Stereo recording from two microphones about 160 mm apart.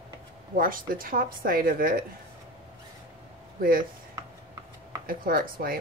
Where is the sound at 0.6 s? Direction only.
60° right (ahead or behind).